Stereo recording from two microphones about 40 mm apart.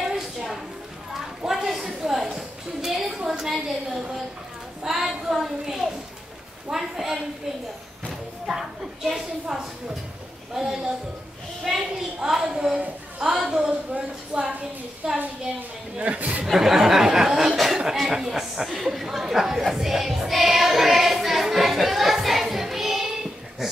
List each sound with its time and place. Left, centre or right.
0.0 s a sound: centre
3.3 s a woman's voice: centre
16.0 s speech: right
16.4 s a woman's voice: centre
18.1 s chatter: centre
23.6 s a sound: centre